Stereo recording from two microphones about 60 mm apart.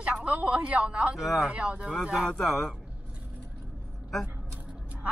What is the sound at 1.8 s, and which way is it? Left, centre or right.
Speech, centre.